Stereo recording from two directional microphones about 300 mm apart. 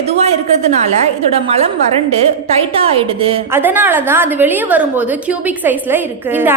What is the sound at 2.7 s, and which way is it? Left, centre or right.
Speech, centre.